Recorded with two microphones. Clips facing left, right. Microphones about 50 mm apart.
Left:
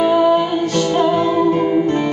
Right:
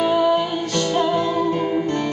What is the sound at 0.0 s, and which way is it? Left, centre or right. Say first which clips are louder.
Music: left 4 dB; centre.